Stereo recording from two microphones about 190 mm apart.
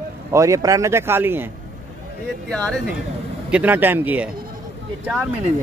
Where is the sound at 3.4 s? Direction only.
5° right (ahead or behind).